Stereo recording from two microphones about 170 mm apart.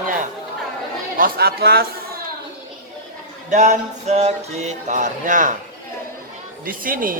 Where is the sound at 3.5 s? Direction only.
45° right (ahead or behind).